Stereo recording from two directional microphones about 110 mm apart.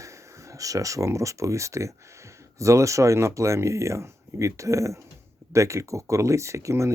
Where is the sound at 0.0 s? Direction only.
30° right (ahead or behind).